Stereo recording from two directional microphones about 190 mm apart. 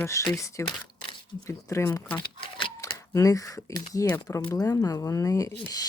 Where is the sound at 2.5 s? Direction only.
25° left (ahead or behind).